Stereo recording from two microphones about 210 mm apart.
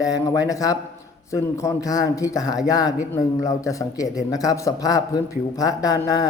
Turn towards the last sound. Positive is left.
turn(degrees=15)  # may be behind; listen again after turning